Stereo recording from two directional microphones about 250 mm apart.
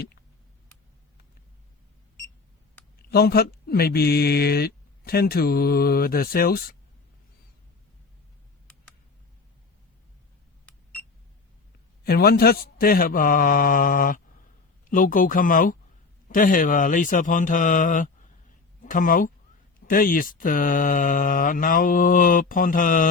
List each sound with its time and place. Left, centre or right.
3.1 s speech: left
12.0 s speech: left